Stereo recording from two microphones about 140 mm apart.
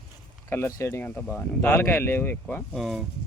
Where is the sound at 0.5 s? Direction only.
15° left (ahead or behind).